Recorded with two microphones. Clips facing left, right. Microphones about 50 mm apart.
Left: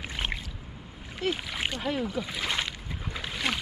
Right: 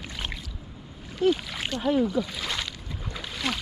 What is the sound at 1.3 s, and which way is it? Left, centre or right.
Splash, centre.